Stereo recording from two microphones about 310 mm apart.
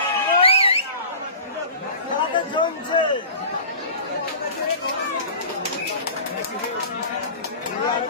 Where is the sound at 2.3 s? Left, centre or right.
Centre.